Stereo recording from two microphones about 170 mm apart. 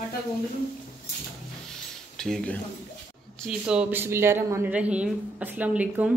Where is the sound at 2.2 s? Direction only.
5° left (ahead or behind).